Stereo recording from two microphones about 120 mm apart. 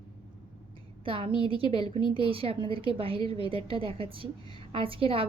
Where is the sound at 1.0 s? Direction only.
50° right (ahead or behind).